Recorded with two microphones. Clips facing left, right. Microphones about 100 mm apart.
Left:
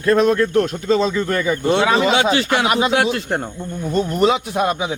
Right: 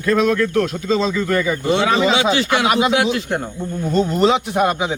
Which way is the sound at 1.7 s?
45° left (ahead or behind).